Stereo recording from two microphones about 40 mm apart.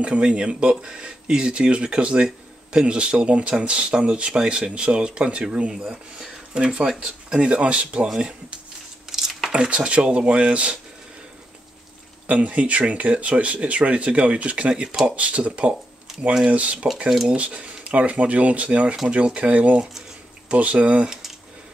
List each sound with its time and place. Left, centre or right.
0.0 s speech: right
9.1 s a sound: centre
9.5 s speech: right
12.3 s speech: right
16.1 s a sound: centre
16.4 s speech: right